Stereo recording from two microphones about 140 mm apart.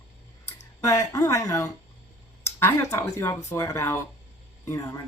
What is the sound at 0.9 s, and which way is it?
Speech, 20° left (ahead or behind).